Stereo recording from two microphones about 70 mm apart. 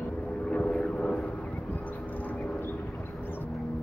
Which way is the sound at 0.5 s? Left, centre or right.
Centre.